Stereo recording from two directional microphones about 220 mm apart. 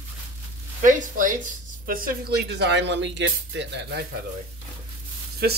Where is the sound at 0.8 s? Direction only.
35° right (ahead or behind).